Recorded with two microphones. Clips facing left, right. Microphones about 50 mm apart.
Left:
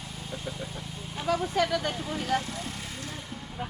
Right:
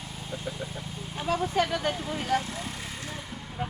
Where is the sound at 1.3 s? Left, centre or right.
Right.